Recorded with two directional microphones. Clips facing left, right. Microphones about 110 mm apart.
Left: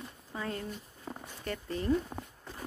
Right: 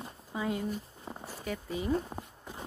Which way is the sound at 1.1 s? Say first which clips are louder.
Left 2 dB; 20° right (ahead or behind).